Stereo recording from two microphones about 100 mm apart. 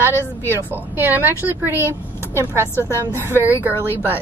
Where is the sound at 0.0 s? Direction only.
25° right (ahead or behind).